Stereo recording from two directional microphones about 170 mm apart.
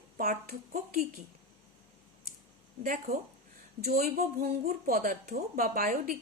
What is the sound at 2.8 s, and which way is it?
Speech, 55° right (ahead or behind).